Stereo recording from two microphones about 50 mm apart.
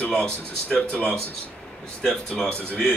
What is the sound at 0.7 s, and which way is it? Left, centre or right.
Speech, left.